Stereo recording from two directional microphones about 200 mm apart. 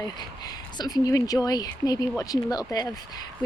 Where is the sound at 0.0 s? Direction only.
20° left (ahead or behind).